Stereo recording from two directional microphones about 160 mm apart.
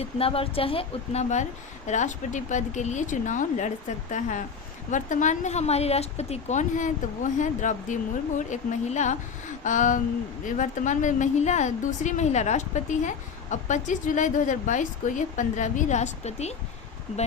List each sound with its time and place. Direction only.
0.0 s a woman's voice: 35° left (ahead or behind)